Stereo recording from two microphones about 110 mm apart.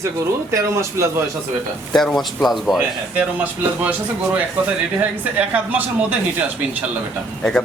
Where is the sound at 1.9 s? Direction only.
5° left (ahead or behind).